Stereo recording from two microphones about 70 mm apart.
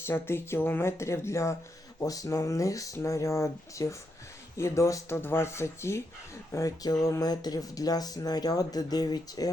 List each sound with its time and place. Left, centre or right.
0.0 s speech: left
2.0 s speech: left